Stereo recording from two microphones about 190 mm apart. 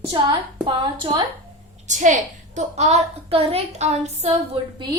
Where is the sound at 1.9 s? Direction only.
40° right (ahead or behind); by 5.0 s 25° right (ahead or behind).